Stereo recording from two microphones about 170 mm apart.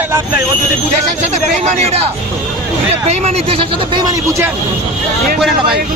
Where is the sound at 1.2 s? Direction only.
40° right (ahead or behind).